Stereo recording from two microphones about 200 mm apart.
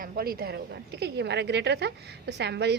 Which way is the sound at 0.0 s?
50° right (ahead or behind).